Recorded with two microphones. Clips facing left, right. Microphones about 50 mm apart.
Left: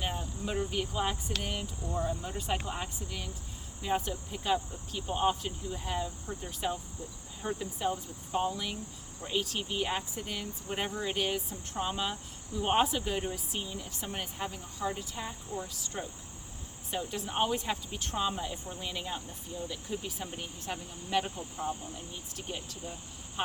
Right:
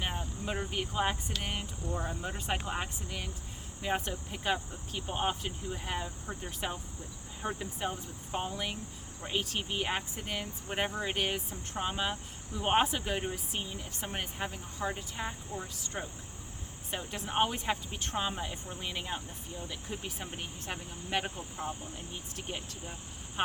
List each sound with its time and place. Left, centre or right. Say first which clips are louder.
0.0 s cricket: left 1 dB; right
1.4 s speech: left 1 dB; right
22.4 s speech: left 2 dB; right